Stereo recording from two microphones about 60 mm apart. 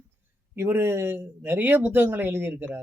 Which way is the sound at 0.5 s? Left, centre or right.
Right.